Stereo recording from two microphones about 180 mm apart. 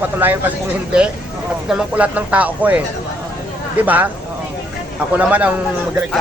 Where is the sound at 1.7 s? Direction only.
5° right (ahead or behind).